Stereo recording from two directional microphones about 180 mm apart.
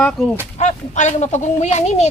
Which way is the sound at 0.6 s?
40° left (ahead or behind).